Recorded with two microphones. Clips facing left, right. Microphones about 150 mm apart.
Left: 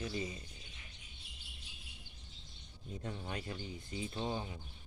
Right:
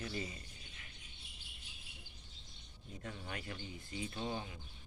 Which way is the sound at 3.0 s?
20° left (ahead or behind).